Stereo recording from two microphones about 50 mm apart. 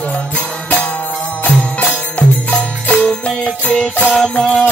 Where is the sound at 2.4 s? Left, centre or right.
Left.